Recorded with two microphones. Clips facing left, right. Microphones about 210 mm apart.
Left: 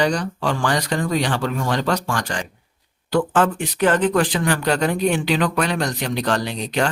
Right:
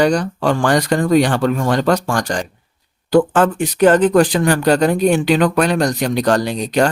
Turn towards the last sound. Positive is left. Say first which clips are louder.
# right 6 dB
turn(degrees=-40)  # may be behind; listen again after turning